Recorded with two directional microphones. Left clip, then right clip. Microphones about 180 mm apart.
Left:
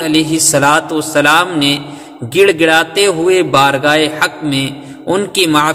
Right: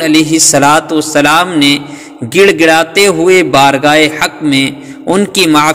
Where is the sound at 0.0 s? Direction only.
25° right (ahead or behind).